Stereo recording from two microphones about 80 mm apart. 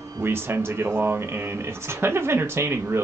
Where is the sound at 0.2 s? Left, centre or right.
Right.